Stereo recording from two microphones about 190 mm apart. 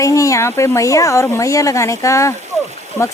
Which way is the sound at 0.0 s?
15° left (ahead or behind).